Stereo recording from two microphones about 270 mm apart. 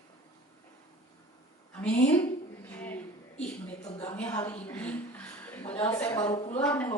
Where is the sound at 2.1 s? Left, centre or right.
Centre.